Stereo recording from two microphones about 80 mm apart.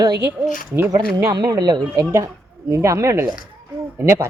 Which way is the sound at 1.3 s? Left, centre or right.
Right.